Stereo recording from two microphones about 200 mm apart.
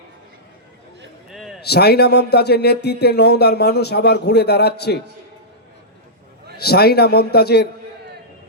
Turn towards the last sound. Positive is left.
turn(degrees=55)  # may be behind; listen again after turning